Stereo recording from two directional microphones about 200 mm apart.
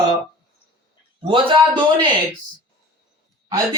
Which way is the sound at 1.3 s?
25° right (ahead or behind).